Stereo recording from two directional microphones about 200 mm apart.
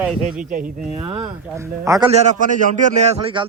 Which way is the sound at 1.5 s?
15° right (ahead or behind).